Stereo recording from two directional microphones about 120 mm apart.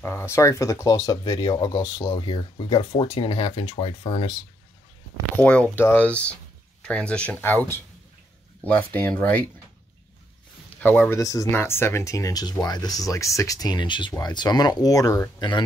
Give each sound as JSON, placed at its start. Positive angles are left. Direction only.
{"t": 0.0, "sound": "speech", "side_deg": 20}
{"t": 2.1, "sound": "speech", "side_deg": 50}
{"t": 5.4, "sound": "speech", "side_deg": 10}
{"t": 10.8, "sound": "speech", "side_deg": 15}